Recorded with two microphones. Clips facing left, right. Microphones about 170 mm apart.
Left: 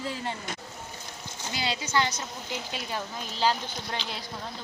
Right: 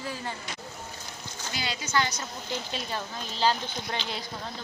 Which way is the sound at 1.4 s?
25° left (ahead or behind).